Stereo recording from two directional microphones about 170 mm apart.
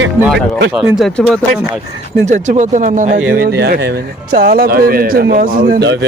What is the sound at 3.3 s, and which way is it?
A man's voice, 60° right (ahead or behind).